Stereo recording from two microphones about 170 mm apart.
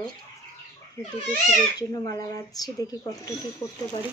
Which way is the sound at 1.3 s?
20° left (ahead or behind).